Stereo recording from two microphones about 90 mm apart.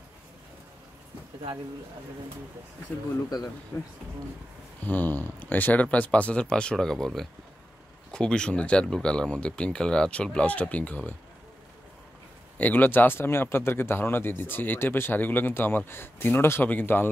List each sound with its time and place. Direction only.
3.7 s speech: 30° left (ahead or behind)
4.8 s speech: 20° left (ahead or behind)
12.5 s speech: 20° left (ahead or behind)